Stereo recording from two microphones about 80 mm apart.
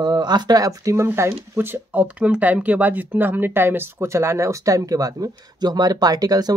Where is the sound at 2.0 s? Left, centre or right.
Centre; by 6.5 s right.